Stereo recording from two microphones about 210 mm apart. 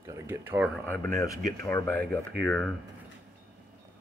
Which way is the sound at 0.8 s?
10° left (ahead or behind).